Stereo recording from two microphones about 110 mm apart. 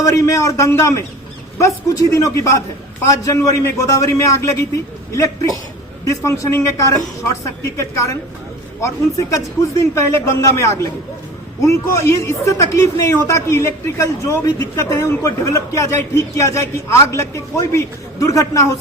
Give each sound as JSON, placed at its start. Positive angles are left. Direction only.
{"t": 0.0, "sound": "a man's voice", "side_deg": 30}